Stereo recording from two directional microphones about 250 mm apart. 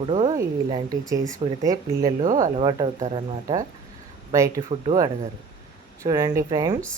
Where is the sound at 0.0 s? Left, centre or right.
Centre.